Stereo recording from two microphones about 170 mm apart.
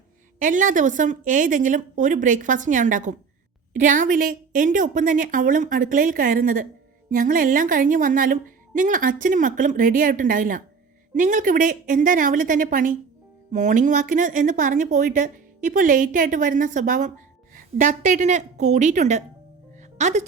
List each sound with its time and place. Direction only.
0.3 s speech: 50° right (ahead or behind)